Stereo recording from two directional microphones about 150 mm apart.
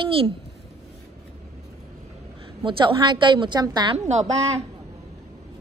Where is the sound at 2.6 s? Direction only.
35° right (ahead or behind).